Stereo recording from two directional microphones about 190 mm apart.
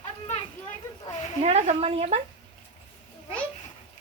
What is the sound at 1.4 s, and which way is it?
Speech, 35° right (ahead or behind).